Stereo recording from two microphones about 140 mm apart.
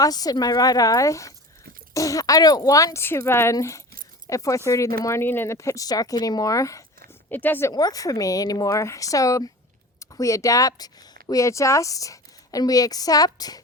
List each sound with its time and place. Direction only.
0.0 s speech: 25° left (ahead or behind)
7.7 s speech: 25° left (ahead or behind)